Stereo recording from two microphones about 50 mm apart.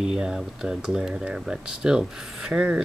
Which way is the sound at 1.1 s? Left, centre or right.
Right.